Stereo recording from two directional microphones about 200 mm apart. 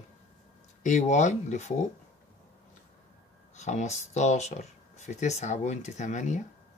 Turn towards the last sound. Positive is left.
turn(degrees=35)  # may be behind; listen again after turning